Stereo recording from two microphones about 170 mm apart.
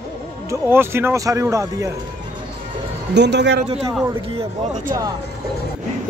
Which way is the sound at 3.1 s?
90° right.